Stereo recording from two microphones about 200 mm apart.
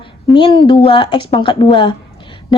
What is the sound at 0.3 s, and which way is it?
A woman's voice, 25° left (ahead or behind).